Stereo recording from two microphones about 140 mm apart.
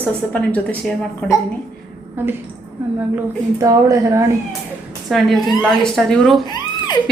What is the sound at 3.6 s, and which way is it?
Speech, 25° right (ahead or behind).